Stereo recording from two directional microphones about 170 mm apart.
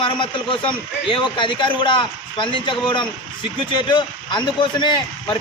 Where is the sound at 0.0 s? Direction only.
30° left (ahead or behind).